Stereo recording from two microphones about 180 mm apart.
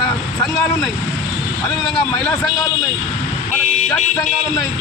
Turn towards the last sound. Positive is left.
turn(degrees=45)  # may be behind; listen again after turning